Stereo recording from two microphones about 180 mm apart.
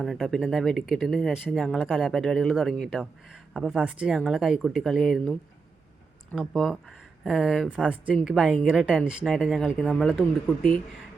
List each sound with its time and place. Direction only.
0.0 s speech: centre (ahead or behind)